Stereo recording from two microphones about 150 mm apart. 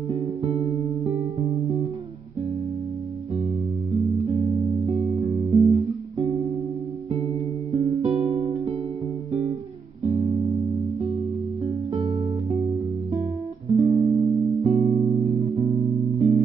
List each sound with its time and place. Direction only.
0.6 s music: 25° right (ahead or behind)
3.9 s music: 20° right (ahead or behind)
7.7 s music: 20° right (ahead or behind)
8.0 s music: 45° right (ahead or behind)
10.0 s music: 20° right (ahead or behind)
10.5 s music: centre (ahead or behind)
11.6 s music: 25° right (ahead or behind)